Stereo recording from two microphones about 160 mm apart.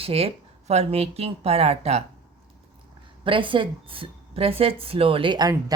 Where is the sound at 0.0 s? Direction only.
35° right (ahead or behind).